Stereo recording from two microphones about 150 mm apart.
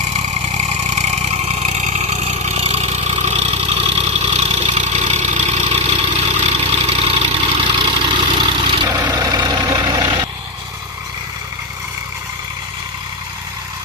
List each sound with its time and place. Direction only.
0.2 s vehicle: 50° right (ahead or behind); by 10.2 s 30° right (ahead or behind)